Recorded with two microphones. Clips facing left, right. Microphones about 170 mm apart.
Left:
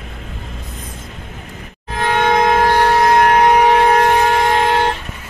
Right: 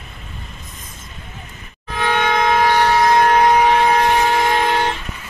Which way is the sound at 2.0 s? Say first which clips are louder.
Left 3 dB; 40° left (ahead or behind).